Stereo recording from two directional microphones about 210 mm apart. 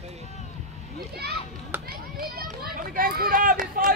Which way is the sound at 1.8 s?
45° right (ahead or behind).